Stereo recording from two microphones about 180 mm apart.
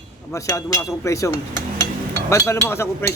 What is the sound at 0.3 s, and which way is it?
Speech, 15° left (ahead or behind).